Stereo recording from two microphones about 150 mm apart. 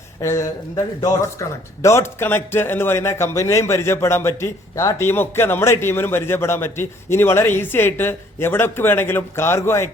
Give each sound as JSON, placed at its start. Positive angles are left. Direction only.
{"t": 0.2, "sound": "speech", "side_deg": 20}